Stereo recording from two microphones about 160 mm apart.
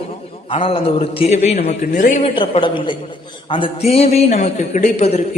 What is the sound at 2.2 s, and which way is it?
A man's voice, 35° left (ahead or behind).